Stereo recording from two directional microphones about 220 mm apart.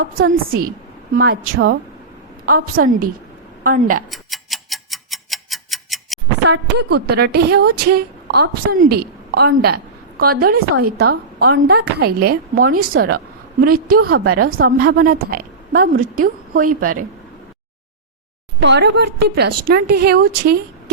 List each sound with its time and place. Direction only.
0.0 s a woman's voice: 40° right (ahead or behind)
4.1 s tick-tock: centre (ahead or behind)
6.5 s a woman's voice: 50° right (ahead or behind)
14.3 s a woman's voice: 85° right
14.8 s a woman's voice: 45° right (ahead or behind)
18.6 s a woman's voice: 50° right (ahead or behind)